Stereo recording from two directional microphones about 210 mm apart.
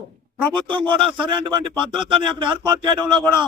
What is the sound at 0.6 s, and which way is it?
Speech, 20° right (ahead or behind).